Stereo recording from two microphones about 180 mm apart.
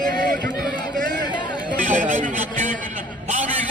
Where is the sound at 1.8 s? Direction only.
45° right (ahead or behind).